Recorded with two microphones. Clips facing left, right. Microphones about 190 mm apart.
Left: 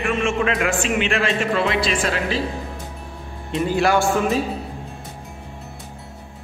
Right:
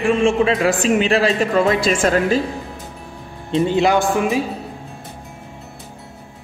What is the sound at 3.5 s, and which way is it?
Speech, 25° right (ahead or behind).